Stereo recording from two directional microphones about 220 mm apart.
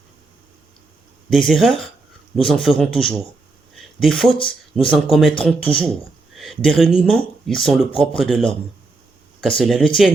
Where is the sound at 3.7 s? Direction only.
Centre (ahead or behind).